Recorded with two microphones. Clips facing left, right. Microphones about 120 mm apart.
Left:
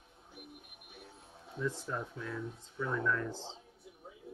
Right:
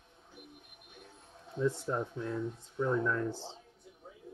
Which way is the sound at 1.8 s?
25° right (ahead or behind).